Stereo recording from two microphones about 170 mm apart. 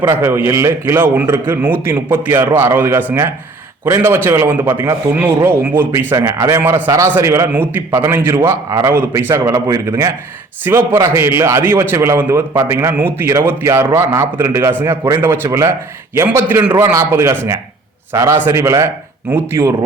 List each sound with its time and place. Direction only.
0.0 s a man's voice: 15° right (ahead or behind)